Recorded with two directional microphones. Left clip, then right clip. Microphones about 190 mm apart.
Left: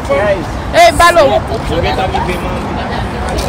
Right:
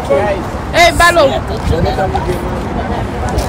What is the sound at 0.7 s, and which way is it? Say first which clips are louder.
Speech: left 2 dB; centre (ahead or behind).